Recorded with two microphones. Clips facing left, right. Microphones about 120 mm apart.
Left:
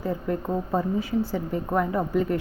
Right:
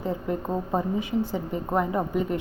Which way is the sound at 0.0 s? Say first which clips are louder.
Left 1 dB; 20° right (ahead or behind).